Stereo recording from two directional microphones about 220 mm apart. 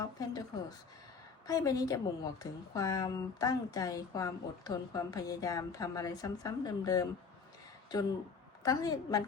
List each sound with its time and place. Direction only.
0.0 s a woman's voice: 15° left (ahead or behind)
8.6 s a woman's voice: 15° left (ahead or behind)